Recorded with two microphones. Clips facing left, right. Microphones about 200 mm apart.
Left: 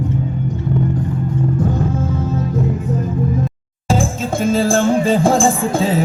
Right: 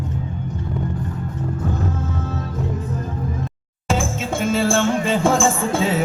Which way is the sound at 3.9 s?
35° left (ahead or behind).